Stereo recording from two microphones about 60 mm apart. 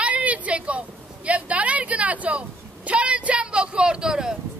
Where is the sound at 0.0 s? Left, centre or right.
Right.